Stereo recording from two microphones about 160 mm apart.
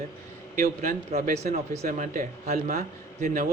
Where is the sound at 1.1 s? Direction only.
40° right (ahead or behind).